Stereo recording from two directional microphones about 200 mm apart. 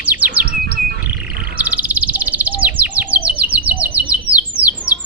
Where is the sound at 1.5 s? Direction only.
10° right (ahead or behind).